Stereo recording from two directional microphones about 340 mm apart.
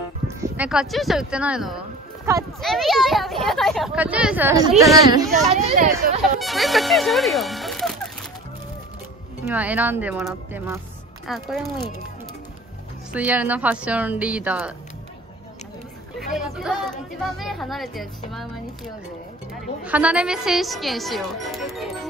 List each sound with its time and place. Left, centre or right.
0.4 s speech: centre
5.1 s speech: centre
6.4 s speech: centre
9.4 s speech: centre
13.1 s speech: centre
16.2 s speech: centre
19.8 s speech: centre